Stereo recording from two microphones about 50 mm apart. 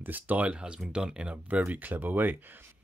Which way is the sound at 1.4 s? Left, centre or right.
Right.